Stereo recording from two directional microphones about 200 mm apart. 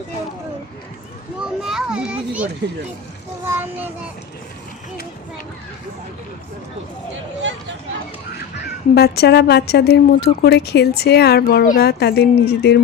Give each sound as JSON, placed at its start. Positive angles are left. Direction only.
{"t": 1.4, "sound": "children playing", "side_deg": 0}
{"t": 3.4, "sound": "child singing", "side_deg": -10}
{"t": 9.0, "sound": "a woman's voice", "side_deg": 50}